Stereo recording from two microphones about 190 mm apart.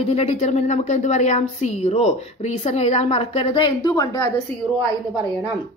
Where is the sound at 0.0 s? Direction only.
35° left (ahead or behind).